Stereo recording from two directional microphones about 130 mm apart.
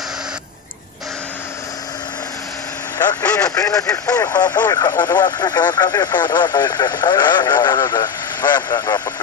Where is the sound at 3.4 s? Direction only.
25° left (ahead or behind).